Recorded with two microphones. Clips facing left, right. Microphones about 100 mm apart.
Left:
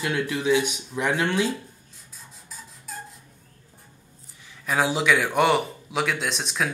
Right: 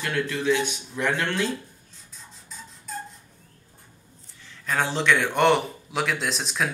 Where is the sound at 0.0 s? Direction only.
15° left (ahead or behind).